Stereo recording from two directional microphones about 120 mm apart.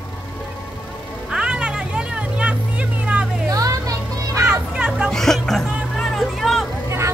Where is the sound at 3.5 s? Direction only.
30° right (ahead or behind).